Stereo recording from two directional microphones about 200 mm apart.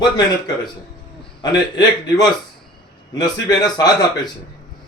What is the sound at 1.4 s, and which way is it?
A man's voice, 20° left (ahead or behind).